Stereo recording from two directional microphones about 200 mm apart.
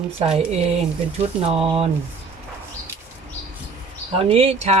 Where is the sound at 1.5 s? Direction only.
30° right (ahead or behind).